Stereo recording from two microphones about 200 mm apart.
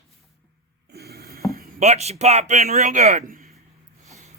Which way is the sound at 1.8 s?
35° right (ahead or behind).